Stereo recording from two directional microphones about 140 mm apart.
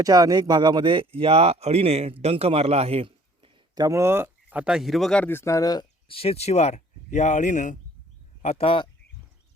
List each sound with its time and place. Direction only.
0.0 s a man's voice: 25° right (ahead or behind); by 3.5 s 45° right (ahead or behind)
3.8 s speech: 20° right (ahead or behind); by 5.8 s 25° left (ahead or behind)
6.1 s speech: 45° left (ahead or behind); by 7.8 s 60° left (ahead or behind)
8.4 s speech: 45° left (ahead or behind)